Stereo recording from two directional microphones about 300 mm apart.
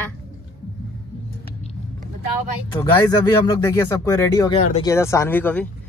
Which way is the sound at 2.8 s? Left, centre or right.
Centre.